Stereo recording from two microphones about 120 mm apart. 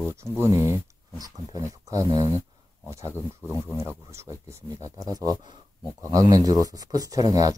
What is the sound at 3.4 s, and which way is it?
Speech, 20° right (ahead or behind).